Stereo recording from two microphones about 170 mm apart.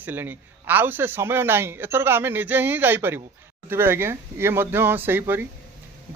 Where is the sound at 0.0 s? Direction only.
10° right (ahead or behind).